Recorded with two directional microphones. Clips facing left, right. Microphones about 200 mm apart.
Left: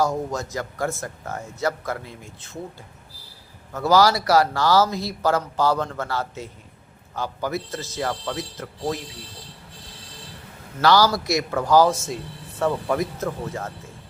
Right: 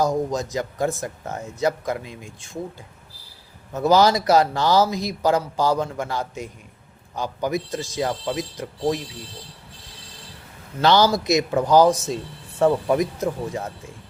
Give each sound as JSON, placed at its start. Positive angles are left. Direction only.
{"t": 0.0, "sound": "speech", "side_deg": -15}
{"t": 3.7, "sound": "speech", "side_deg": -20}
{"t": 10.8, "sound": "a man's voice", "side_deg": -20}